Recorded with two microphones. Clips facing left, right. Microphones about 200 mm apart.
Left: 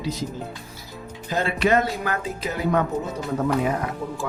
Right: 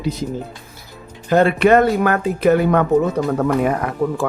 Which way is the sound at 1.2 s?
60° right (ahead or behind).